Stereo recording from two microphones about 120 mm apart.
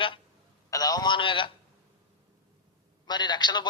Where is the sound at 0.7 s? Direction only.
30° left (ahead or behind).